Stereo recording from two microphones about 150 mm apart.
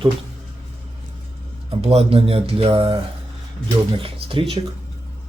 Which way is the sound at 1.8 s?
40° right (ahead or behind).